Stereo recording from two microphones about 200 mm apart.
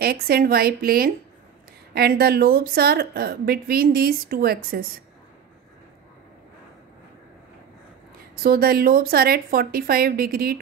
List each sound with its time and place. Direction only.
0.0 s speech: 50° right (ahead or behind)
8.4 s speech: 45° right (ahead or behind)